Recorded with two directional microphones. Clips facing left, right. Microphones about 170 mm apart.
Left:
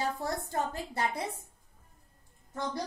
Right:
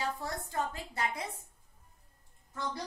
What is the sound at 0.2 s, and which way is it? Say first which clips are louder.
A woman's voice: left 3 dB; 35° left (ahead or behind).